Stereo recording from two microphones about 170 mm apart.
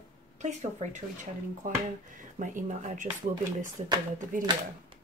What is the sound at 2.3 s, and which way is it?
Speech, 45° right (ahead or behind).